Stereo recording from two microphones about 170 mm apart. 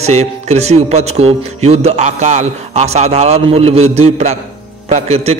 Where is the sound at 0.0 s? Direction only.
40° right (ahead or behind).